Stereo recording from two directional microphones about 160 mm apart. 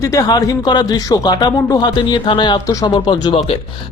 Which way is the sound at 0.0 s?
20° left (ahead or behind).